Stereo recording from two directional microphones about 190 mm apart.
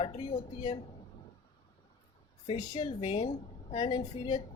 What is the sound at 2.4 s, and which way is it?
A woman's voice, 30° left (ahead or behind).